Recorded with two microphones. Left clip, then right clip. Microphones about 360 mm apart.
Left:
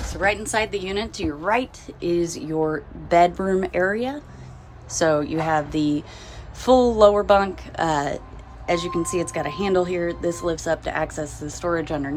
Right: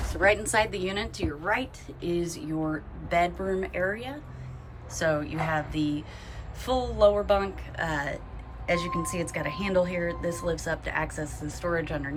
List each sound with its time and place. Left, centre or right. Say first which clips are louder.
0.2 s a woman's voice: left 1 dB; centre